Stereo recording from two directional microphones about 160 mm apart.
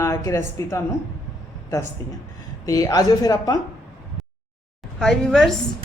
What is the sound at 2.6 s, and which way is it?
Speech, 20° left (ahead or behind).